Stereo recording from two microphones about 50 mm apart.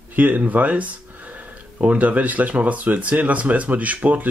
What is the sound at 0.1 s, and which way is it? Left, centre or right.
Speech, right.